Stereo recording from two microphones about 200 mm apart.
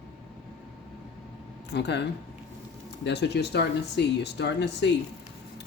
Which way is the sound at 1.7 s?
60° left (ahead or behind).